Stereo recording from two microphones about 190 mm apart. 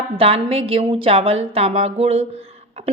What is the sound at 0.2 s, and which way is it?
A woman's voice, 30° right (ahead or behind).